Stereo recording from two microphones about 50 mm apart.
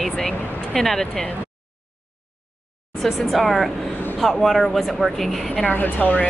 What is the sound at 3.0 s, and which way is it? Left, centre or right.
A woman's voice, centre.